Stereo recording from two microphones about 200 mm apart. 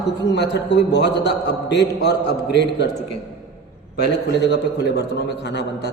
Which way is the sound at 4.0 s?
55° left (ahead or behind).